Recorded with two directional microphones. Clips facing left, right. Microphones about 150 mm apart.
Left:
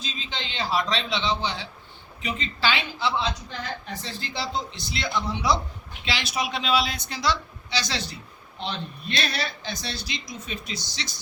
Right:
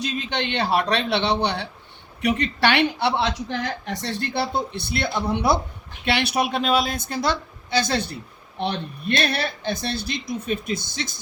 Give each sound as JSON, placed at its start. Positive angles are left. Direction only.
{"t": 0.0, "sound": "a woman's voice", "side_deg": -65}